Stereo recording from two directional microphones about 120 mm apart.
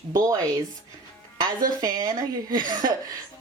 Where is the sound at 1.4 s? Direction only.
35° right (ahead or behind).